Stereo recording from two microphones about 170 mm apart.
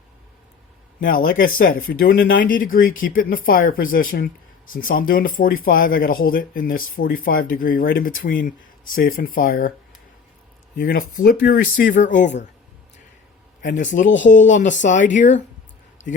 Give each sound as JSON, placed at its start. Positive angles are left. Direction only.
{"t": 1.0, "sound": "speech", "side_deg": 55}
{"t": 10.8, "sound": "speech", "side_deg": 55}
{"t": 13.6, "sound": "a man's voice", "side_deg": 50}
{"t": 14.1, "sound": "speech", "side_deg": 90}
{"t": 14.3, "sound": "a man's voice", "side_deg": 45}